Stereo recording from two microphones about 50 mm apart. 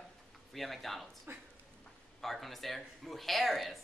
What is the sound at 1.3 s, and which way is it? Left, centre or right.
Speech, right.